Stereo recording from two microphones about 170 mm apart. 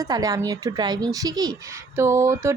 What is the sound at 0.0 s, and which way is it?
A woman's voice, 20° right (ahead or behind).